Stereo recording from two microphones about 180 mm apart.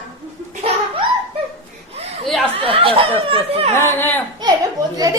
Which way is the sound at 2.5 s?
30° right (ahead or behind).